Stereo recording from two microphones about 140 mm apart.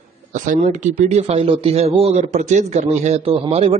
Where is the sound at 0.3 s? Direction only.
60° right (ahead or behind).